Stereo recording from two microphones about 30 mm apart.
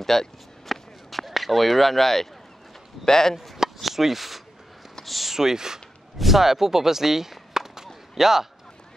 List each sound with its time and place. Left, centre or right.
0.0 s a sound: centre
3.1 s chop: centre
3.8 s speech: centre
5.0 s a sound: centre
5.3 s speech: centre
6.1 s speech: centre